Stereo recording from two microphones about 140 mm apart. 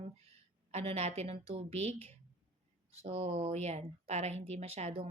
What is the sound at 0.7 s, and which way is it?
Speech, 50° right (ahead or behind).